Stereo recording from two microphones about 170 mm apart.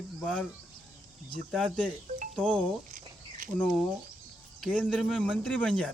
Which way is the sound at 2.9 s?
50° right (ahead or behind).